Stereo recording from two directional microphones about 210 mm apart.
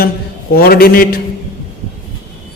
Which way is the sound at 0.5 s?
45° left (ahead or behind).